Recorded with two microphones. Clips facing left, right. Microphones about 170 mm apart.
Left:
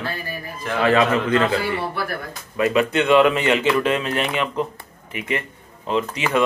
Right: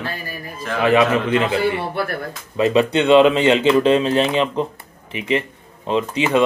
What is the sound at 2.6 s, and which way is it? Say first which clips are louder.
Speech: right 3 dB; 30° right (ahead or behind).